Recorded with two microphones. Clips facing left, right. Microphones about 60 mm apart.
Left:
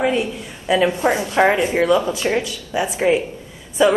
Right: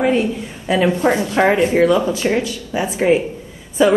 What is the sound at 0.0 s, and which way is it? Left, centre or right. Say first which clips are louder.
Speech: right 3 dB; right.